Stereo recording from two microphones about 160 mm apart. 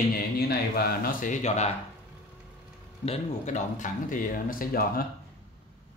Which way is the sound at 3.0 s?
45° left (ahead or behind).